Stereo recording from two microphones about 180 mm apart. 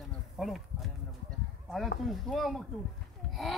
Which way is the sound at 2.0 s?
Centre (ahead or behind).